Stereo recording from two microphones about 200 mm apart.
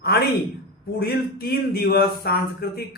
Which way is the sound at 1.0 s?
50° left (ahead or behind).